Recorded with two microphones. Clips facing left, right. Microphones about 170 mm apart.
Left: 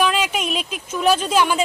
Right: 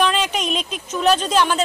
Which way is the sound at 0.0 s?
5° left (ahead or behind).